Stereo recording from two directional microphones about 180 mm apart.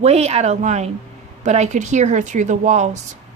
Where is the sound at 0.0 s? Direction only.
35° right (ahead or behind).